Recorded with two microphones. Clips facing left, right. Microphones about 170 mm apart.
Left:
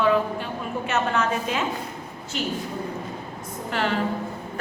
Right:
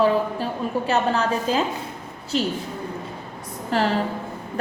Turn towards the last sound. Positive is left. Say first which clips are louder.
# right 4 dB
turn(degrees=-35)  # may be behind; listen again after turning